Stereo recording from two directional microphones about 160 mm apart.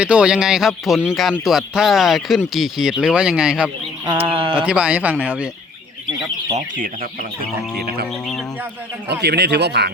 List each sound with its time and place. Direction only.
0.0 s speech: 5° right (ahead or behind)
4.2 s speech: 35° right (ahead or behind)
4.5 s speech: 5° right (ahead or behind)
6.7 s speech: 60° right (ahead or behind)
9.0 s speech: 90° right